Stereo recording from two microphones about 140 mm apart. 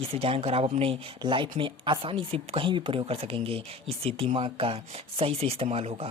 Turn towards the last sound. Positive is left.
turn(degrees=-45)  # may be behind; listen again after turning